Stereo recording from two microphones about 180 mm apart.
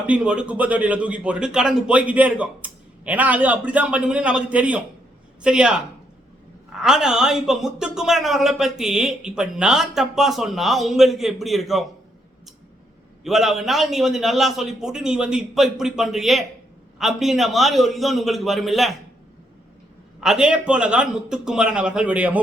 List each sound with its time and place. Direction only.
0.1 s a man's voice: 5° right (ahead or behind)
13.2 s speech: centre (ahead or behind)
20.2 s speech: 5° right (ahead or behind)